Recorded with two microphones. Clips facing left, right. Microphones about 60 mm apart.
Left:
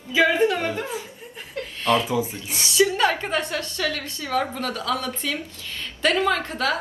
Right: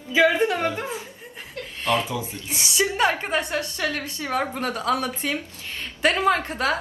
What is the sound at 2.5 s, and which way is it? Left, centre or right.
A woman's voice, right.